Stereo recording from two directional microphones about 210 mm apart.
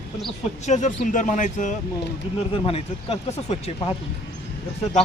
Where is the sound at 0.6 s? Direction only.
35° left (ahead or behind).